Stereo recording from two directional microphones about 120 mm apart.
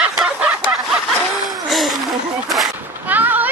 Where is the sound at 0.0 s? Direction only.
10° right (ahead or behind).